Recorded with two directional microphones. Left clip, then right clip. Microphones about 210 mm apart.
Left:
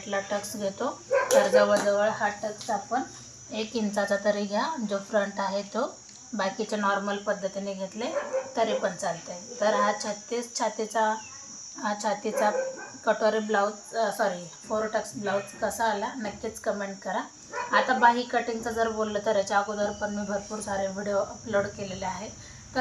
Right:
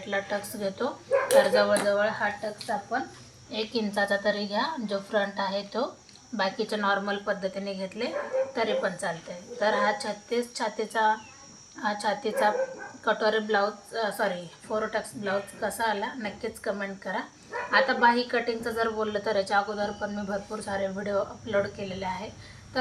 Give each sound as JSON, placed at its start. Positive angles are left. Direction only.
{"t": 0.1, "sound": "speech", "side_deg": -20}
{"t": 3.5, "sound": "a woman's voice", "side_deg": 0}